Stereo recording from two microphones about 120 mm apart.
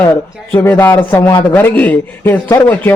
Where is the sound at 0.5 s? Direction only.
15° left (ahead or behind).